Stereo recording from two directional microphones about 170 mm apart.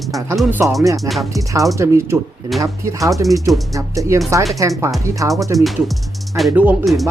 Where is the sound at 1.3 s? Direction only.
20° right (ahead or behind).